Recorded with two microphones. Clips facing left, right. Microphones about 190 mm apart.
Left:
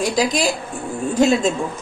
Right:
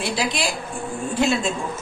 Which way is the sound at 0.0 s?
40° left (ahead or behind).